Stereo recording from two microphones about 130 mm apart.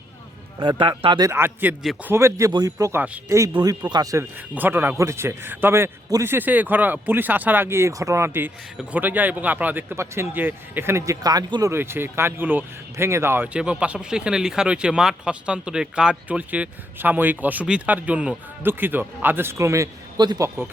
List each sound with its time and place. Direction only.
0.6 s speech: 35° right (ahead or behind)
1.3 s speech: 15° right (ahead or behind)
4.5 s speech: 15° right (ahead or behind); by 20.5 s 30° right (ahead or behind)